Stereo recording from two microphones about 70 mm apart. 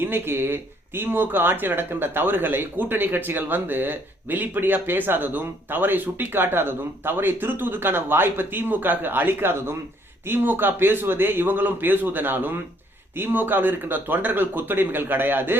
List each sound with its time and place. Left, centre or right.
0.0 s speech: right